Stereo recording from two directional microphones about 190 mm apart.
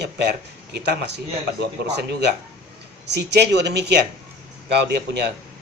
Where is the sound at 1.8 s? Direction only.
60° right (ahead or behind).